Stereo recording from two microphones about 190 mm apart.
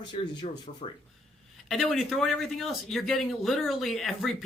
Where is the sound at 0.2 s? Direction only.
30° left (ahead or behind).